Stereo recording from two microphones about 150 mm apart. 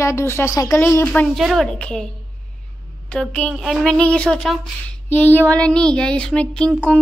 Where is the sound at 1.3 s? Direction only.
Centre (ahead or behind).